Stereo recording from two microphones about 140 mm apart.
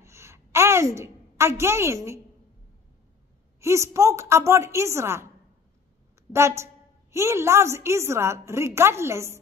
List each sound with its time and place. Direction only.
0.0 s a sound: 20° right (ahead or behind)
3.6 s a woman's voice: 20° right (ahead or behind)
6.3 s a woman's voice: 20° right (ahead or behind)